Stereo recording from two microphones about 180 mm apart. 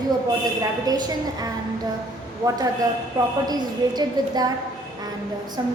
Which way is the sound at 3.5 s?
20° right (ahead or behind).